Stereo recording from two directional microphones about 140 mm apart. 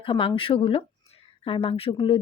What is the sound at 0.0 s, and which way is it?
Speech, 40° left (ahead or behind).